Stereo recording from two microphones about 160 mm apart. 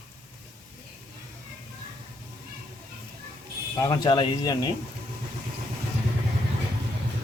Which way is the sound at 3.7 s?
25° left (ahead or behind).